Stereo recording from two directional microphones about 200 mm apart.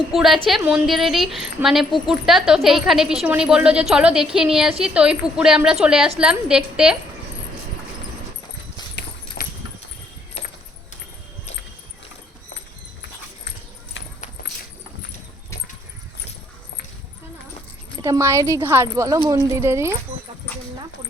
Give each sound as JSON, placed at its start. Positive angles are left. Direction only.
{"t": 0.1, "sound": "a woman's voice", "side_deg": 0}
{"t": 9.4, "sound": "clip-clop", "side_deg": 50}
{"t": 18.0, "sound": "speech", "side_deg": -15}